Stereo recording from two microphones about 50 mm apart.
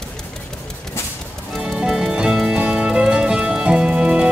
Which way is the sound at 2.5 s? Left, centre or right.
Right.